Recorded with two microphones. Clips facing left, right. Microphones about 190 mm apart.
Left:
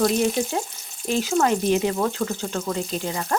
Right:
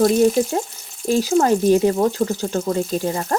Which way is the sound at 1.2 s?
35° right (ahead or behind).